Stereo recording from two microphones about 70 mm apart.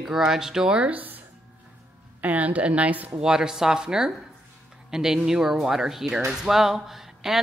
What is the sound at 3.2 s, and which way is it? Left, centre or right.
A woman's voice, centre.